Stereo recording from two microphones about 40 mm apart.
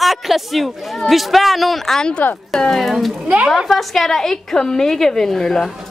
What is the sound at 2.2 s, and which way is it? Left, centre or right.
Speech, left.